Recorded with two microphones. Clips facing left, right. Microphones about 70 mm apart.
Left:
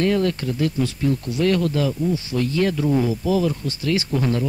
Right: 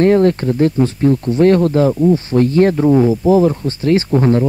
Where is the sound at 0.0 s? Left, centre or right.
Right.